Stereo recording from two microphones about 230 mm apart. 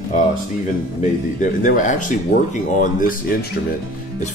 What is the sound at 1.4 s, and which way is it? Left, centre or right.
Speech, left.